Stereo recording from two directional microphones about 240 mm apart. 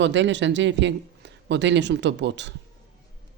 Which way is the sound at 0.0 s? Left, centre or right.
Right.